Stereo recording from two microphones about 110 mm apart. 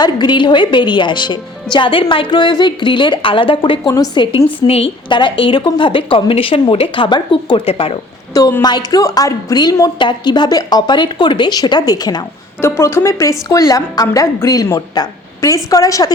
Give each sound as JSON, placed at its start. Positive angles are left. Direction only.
{"t": 0.0, "sound": "a woman's voice", "side_deg": 40}
{"t": 3.8, "sound": "a woman's voice", "side_deg": 35}
{"t": 4.6, "sound": "a woman's voice", "side_deg": 60}
{"t": 8.3, "sound": "a woman's voice", "side_deg": 30}
{"t": 12.6, "sound": "a woman's voice", "side_deg": 25}